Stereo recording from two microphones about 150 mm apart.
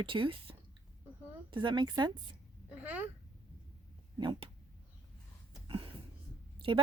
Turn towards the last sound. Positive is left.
turn(degrees=-35)  # may be behind; listen again after turning